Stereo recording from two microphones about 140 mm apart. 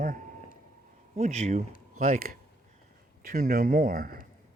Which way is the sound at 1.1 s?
55° right (ahead or behind).